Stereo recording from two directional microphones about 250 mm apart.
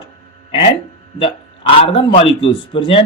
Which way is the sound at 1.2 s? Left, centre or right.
Centre.